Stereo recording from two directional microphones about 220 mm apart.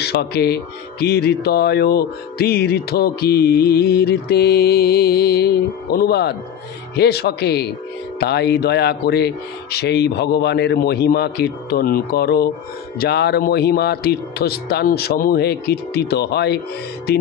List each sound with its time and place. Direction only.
0.0 s speech: 45° left (ahead or behind)